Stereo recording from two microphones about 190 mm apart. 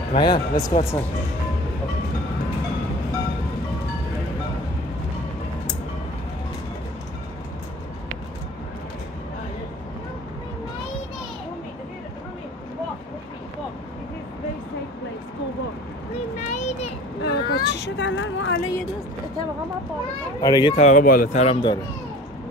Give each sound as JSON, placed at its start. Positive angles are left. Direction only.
{"t": 0.1, "sound": "speech", "side_deg": 25}
{"t": 16.4, "sound": "child singing", "side_deg": 40}
{"t": 17.2, "sound": "vehicle", "side_deg": 60}
{"t": 20.3, "sound": "speech", "side_deg": 20}
{"t": 20.7, "sound": "speech", "side_deg": 40}